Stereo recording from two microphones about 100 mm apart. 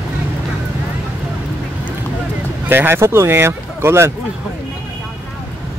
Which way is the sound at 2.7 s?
25° right (ahead or behind).